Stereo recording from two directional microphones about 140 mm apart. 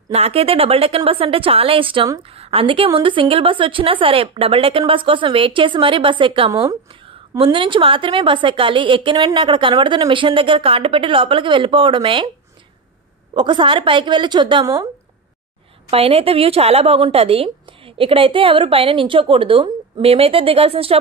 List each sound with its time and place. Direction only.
0.1 s a woman's voice: 45° right (ahead or behind)
6.5 s speech: 25° right (ahead or behind)
6.9 s a woman's voice: 40° right (ahead or behind)
13.3 s a woman's voice: 35° right (ahead or behind)
15.9 s a woman's voice: 45° right (ahead or behind)